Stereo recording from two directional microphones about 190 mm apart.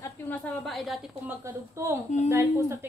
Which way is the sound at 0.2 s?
10° left (ahead or behind).